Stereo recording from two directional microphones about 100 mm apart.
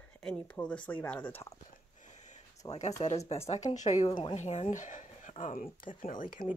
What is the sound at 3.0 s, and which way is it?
Speech, 90° left.